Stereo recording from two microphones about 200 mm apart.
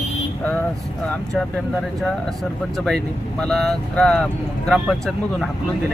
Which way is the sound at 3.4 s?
Centre (ahead or behind).